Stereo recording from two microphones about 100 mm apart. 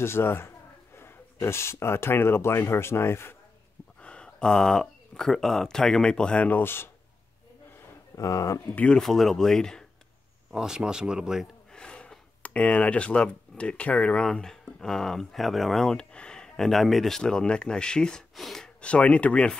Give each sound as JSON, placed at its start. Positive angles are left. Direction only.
{"t": 0.0, "sound": "speech", "side_deg": 25}
{"t": 4.0, "sound": "speech", "side_deg": 10}
{"t": 8.2, "sound": "speech", "side_deg": 35}
{"t": 8.7, "sound": "speech", "side_deg": 10}
{"t": 10.5, "sound": "speech", "side_deg": -5}
{"t": 11.7, "sound": "speech", "side_deg": 10}